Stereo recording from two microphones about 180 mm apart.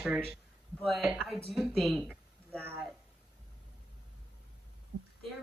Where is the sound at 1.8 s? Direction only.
Centre (ahead or behind).